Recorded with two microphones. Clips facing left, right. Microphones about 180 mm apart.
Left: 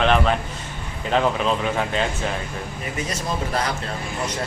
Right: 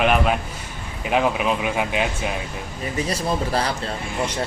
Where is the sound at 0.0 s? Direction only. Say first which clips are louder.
Even; 10° right (ahead or behind).